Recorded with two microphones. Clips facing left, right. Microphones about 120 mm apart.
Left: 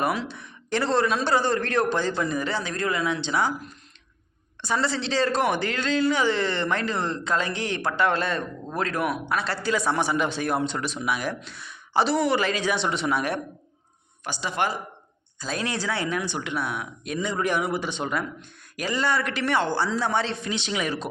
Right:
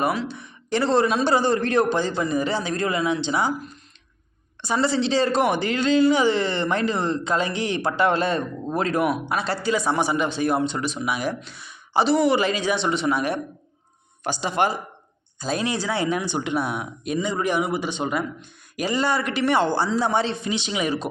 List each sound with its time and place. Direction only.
0.3 s speech: centre (ahead or behind)
0.9 s a man's voice: 15° right (ahead or behind)
4.6 s a man's voice: 5° right (ahead or behind)
7.9 s a man's voice: 15° right (ahead or behind)
9.6 s speech: centre (ahead or behind)
14.4 s a man's voice: 20° right (ahead or behind)
17.2 s a man's voice: 5° right (ahead or behind)